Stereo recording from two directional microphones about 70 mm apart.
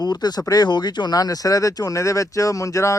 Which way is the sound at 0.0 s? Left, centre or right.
Left.